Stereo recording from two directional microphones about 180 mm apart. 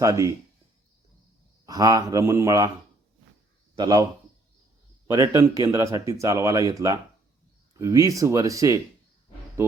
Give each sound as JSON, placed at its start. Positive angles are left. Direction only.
{"t": 0.0, "sound": "speech", "side_deg": -15}
{"t": 1.6, "sound": "speech", "side_deg": -20}
{"t": 3.8, "sound": "speech", "side_deg": -20}
{"t": 5.0, "sound": "speech", "side_deg": -15}